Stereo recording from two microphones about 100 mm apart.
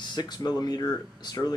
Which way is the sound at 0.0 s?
45° left (ahead or behind).